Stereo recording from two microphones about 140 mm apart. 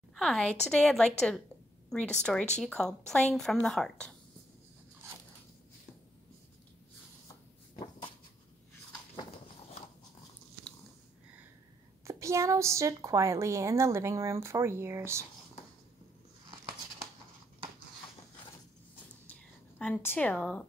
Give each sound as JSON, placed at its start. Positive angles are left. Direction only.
{"t": 0.1, "sound": "a woman's voice", "side_deg": 0}
{"t": 12.1, "sound": "a woman's voice", "side_deg": -20}
{"t": 19.8, "sound": "a woman's voice", "side_deg": 15}